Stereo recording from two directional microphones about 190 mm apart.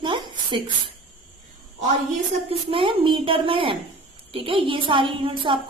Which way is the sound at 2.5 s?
30° right (ahead or behind).